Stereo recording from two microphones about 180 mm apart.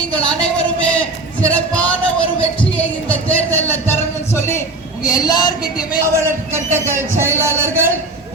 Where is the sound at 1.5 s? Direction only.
5° left (ahead or behind).